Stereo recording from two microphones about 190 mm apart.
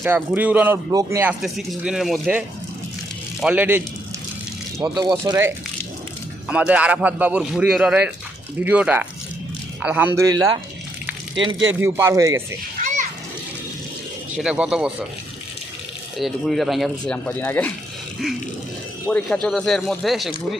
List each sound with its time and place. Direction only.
0.0 s speech: 10° right (ahead or behind)
3.4 s speech: 10° right (ahead or behind)
4.8 s speech: 20° right (ahead or behind)
11.8 s speech: 15° right (ahead or behind)
14.3 s speech: 5° right (ahead or behind)
16.1 s speech: centre (ahead or behind)
19.0 s speech: 5° left (ahead or behind)